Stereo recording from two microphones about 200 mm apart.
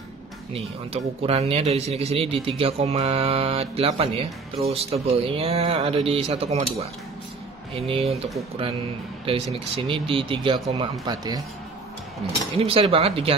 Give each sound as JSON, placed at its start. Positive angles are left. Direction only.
{"t": 0.5, "sound": "speech", "side_deg": -30}
{"t": 12.5, "sound": "speech", "side_deg": -30}